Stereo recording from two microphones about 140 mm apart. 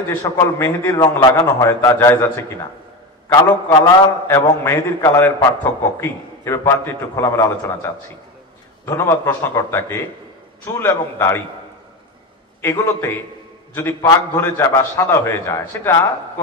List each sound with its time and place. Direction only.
0.2 s a man's voice: 20° left (ahead or behind)
3.7 s a man's voice: 20° left (ahead or behind)
12.6 s a man's voice: 20° left (ahead or behind)